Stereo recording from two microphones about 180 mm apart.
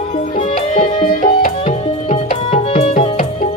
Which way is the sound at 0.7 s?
35° left (ahead or behind).